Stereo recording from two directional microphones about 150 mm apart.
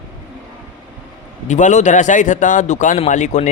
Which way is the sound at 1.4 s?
55° left (ahead or behind).